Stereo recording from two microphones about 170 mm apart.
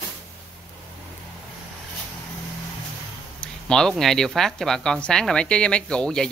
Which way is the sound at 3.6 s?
5° left (ahead or behind).